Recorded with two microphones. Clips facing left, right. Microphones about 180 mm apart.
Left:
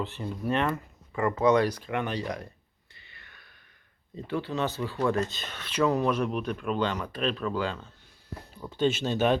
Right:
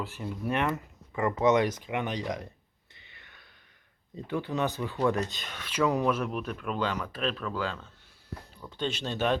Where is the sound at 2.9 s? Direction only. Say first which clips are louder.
Left 1 dB; 20° right (ahead or behind).